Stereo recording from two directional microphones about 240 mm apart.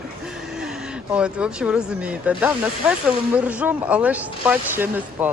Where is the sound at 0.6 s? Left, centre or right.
Centre.